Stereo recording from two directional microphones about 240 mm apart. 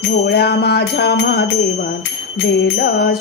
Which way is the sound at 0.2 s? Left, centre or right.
Left.